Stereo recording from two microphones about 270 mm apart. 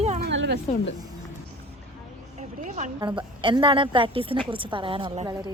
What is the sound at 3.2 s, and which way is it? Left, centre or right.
A woman's voice, centre.